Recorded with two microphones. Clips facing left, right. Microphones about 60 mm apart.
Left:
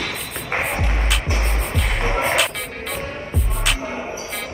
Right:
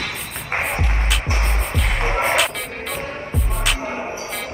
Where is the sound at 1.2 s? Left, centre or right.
Right.